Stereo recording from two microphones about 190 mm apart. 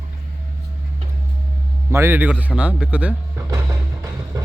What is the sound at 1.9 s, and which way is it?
Speech, 15° right (ahead or behind).